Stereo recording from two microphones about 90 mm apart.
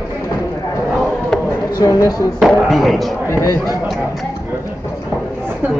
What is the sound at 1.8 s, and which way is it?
Speech, 35° left (ahead or behind).